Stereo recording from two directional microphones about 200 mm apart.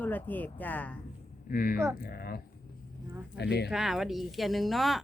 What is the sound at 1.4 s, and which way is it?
Speech, 45° left (ahead or behind).